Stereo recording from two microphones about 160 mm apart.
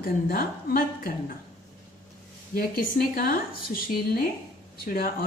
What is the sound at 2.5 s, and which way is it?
Speech, 65° left (ahead or behind).